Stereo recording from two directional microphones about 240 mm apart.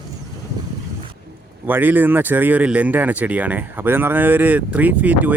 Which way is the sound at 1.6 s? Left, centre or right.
Centre.